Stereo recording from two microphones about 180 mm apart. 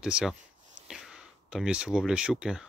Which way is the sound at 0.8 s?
5° right (ahead or behind).